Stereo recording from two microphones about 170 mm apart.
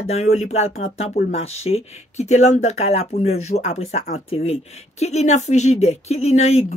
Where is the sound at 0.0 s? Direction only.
40° left (ahead or behind).